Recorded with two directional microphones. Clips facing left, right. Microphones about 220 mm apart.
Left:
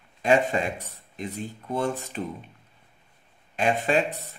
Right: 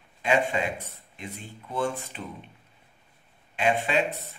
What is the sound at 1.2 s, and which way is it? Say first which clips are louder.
Speech: left 7 dB; 40° left (ahead or behind).